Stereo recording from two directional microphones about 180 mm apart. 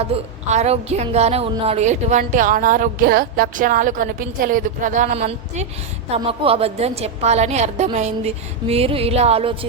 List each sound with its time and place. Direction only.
0.0 s a woman's voice: 35° right (ahead or behind)